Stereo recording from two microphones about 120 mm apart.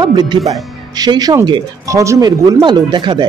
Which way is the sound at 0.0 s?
35° right (ahead or behind).